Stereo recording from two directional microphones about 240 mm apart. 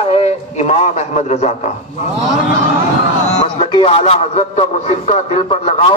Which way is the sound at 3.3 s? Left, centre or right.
Centre.